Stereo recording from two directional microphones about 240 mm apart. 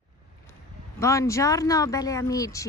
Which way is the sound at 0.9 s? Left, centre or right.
Centre.